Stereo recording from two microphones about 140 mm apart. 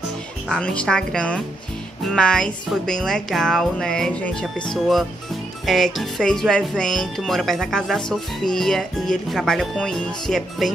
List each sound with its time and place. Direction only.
0.5 s speech: 5° left (ahead or behind)